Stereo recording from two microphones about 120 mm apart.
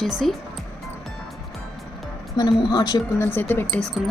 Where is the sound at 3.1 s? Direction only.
20° left (ahead or behind).